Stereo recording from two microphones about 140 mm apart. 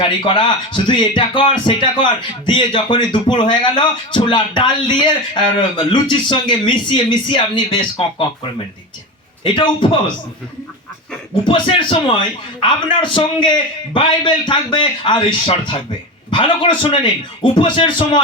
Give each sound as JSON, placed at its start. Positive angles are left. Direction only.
{"t": 0.0, "sound": "speech", "side_deg": 35}
{"t": 9.4, "sound": "speech", "side_deg": 35}
{"t": 11.4, "sound": "speech", "side_deg": 35}